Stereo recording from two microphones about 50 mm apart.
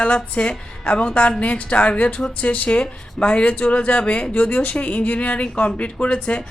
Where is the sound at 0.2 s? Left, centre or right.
Centre.